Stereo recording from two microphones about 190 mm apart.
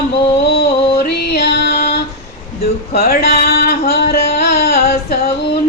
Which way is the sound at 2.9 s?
55° left (ahead or behind).